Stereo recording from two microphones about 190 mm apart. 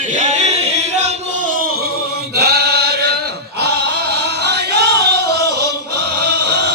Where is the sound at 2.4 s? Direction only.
55° right (ahead or behind).